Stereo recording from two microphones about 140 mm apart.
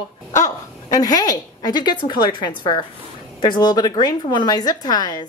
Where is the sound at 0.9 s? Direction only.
25° left (ahead or behind).